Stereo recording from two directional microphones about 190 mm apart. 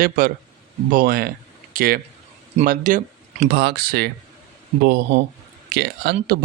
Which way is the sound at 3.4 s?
55° right (ahead or behind).